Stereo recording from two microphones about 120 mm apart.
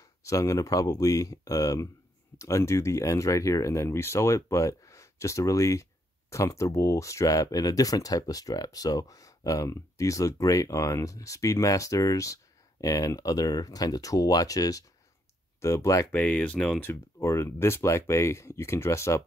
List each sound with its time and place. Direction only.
0.2 s speech: 25° left (ahead or behind)
16.1 s speech: 10° left (ahead or behind)
16.8 s speech: 20° left (ahead or behind)